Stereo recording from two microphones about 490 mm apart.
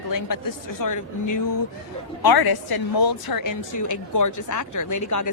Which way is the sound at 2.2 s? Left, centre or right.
Left.